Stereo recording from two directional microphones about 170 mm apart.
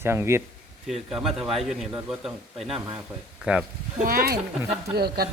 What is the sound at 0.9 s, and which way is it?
A man's voice, centre (ahead or behind).